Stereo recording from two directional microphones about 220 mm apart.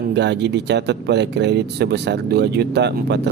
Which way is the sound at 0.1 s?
50° right (ahead or behind).